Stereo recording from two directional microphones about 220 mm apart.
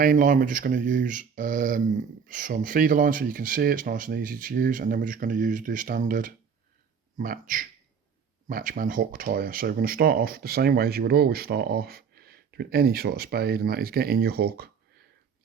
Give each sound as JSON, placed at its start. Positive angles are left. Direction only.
{"t": 0.0, "sound": "speech", "side_deg": -40}